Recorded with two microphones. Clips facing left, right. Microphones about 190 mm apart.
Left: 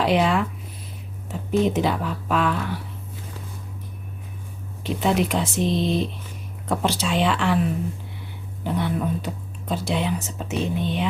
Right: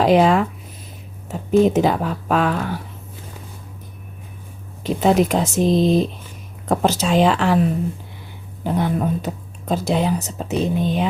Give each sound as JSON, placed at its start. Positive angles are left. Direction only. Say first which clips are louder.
{"t": 0.0, "sound": "speech", "louder": "right 6 dB", "side_deg": -40}
{"t": 4.8, "sound": "speech", "louder": "right 5 dB", "side_deg": -40}
{"t": 8.6, "sound": "speech", "louder": "right 4 dB", "side_deg": -45}